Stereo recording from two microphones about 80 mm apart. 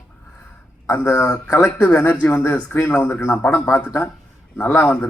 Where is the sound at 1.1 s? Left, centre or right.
Centre.